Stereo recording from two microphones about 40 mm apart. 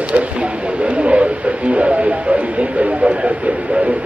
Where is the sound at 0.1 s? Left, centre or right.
Right.